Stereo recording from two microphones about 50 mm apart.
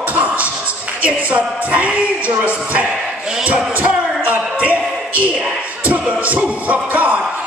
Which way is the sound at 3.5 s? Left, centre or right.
Right.